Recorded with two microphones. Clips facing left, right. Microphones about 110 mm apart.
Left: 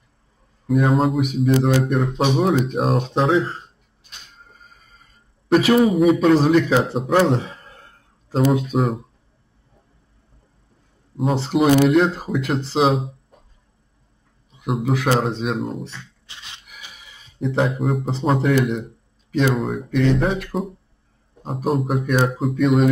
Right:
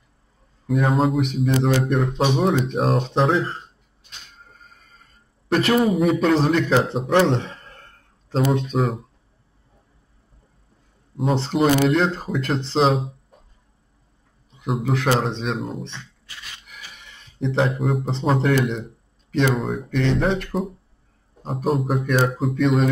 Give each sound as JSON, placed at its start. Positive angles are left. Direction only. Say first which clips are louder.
{"t": 0.7, "sound": "speech", "louder": "left 2 dB", "side_deg": 0}
{"t": 4.5, "sound": "music", "louder": "even", "side_deg": 5}
{"t": 5.5, "sound": "a man's voice", "louder": "left 3 dB", "side_deg": 0}
{"t": 11.1, "sound": "speech", "louder": "left 1 dB", "side_deg": 0}
{"t": 14.5, "sound": "speech", "louder": "left 2 dB", "side_deg": 0}
{"t": 16.3, "sound": "a sound", "louder": "right 1 dB", "side_deg": 25}
{"t": 16.9, "sound": "speech", "louder": "even", "side_deg": 5}